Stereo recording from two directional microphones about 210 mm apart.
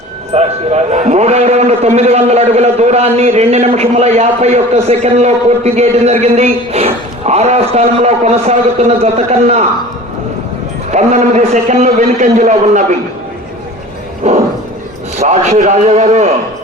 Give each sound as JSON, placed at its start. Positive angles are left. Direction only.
{"t": 0.3, "sound": "a man's voice", "side_deg": -30}
{"t": 10.9, "sound": "a man's voice", "side_deg": -30}
{"t": 14.3, "sound": "a man's voice", "side_deg": -30}